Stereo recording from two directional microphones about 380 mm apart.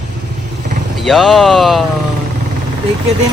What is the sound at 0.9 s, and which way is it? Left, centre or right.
Speech, centre.